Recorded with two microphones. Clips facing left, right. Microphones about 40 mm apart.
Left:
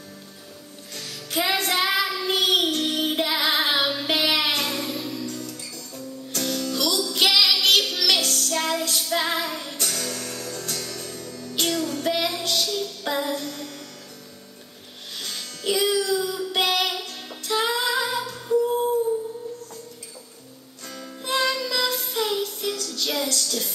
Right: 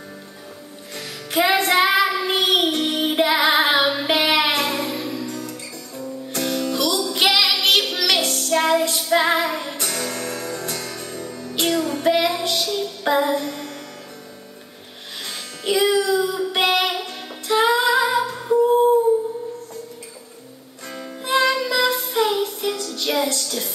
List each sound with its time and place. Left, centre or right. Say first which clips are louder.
0.9 s music: right 6 dB; centre
15.2 s music: right 3 dB; centre
20.9 s music: right 5 dB; right